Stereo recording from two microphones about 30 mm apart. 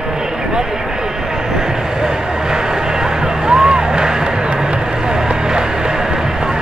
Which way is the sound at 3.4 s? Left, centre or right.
Right.